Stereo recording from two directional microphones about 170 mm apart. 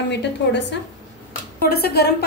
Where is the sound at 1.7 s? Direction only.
65° left (ahead or behind).